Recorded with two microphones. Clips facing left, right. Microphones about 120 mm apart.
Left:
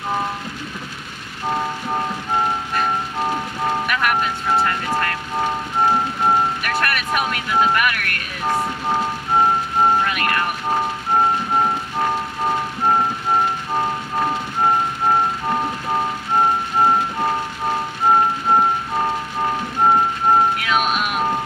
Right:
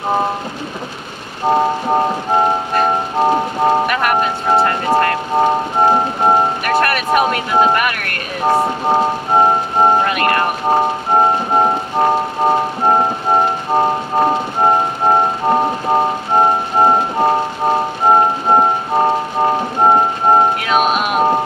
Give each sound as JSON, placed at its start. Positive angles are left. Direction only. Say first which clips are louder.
{"t": 1.5, "sound": "music", "louder": "right 9 dB", "side_deg": -45}
{"t": 6.7, "sound": "a sound", "louder": "right 7 dB", "side_deg": -40}
{"t": 8.6, "sound": "music", "louder": "right 7 dB", "side_deg": -40}